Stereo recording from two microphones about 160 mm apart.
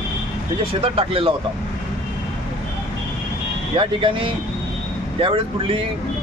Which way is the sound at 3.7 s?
35° right (ahead or behind).